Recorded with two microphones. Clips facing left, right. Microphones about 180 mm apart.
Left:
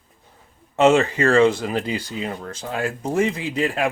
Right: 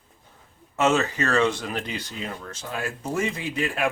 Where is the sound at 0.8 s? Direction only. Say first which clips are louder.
Left 6 dB; 30° left (ahead or behind).